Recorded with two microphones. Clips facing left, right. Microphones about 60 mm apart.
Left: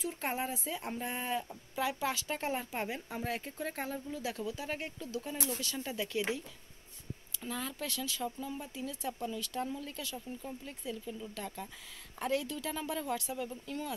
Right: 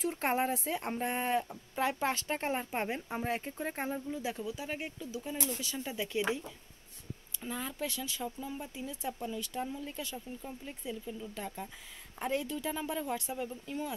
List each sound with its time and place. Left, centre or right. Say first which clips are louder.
0.0 s speech: right 5 dB; right; by 13.9 s centre